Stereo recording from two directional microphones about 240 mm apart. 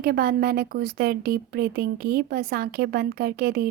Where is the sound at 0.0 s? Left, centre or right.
Right.